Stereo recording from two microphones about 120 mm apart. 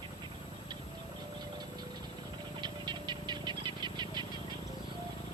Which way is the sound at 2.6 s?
40° right (ahead or behind).